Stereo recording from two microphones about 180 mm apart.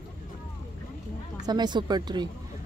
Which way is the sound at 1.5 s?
25° right (ahead or behind).